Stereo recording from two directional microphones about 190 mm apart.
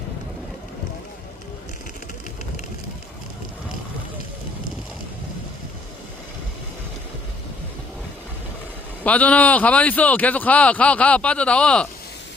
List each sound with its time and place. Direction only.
9.0 s speech: 5° left (ahead or behind)